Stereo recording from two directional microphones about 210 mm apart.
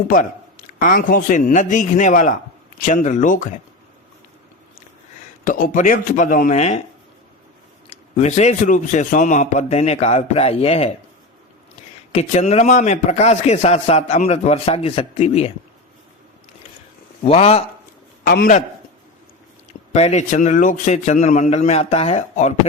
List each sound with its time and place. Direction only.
0.1 s speech: 40° left (ahead or behind)
5.5 s speech: 40° left (ahead or behind)
7.9 s speech: 30° left (ahead or behind)
12.1 s speech: 30° left (ahead or behind)
17.2 s speech: 30° left (ahead or behind)
18.3 s a man's voice: 50° left (ahead or behind)
19.9 s speech: 30° left (ahead or behind)